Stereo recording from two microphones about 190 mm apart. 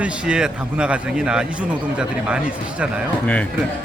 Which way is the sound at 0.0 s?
5° right (ahead or behind).